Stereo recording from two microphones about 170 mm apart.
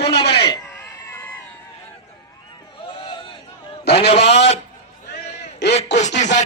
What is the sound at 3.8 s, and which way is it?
Speech, 75° left (ahead or behind).